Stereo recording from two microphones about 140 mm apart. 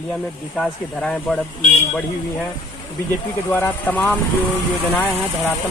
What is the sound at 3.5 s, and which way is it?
Speech, 15° left (ahead or behind).